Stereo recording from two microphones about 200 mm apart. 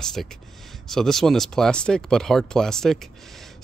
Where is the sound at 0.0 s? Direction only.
Centre (ahead or behind).